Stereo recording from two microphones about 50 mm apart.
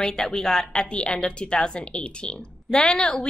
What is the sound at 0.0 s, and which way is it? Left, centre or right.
A woman's voice, centre.